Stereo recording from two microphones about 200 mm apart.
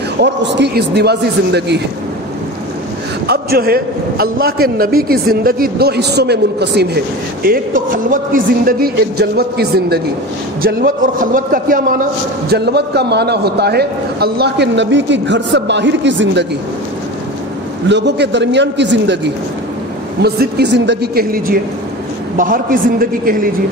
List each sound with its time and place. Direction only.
0.2 s a man's voice: 60° right (ahead or behind)
3.3 s a man's voice: 50° right (ahead or behind)
17.8 s a man's voice: 60° right (ahead or behind)